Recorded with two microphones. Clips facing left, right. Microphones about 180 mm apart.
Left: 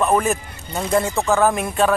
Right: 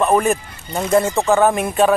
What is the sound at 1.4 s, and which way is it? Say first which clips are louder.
Speech: right 2 dB; centre (ahead or behind).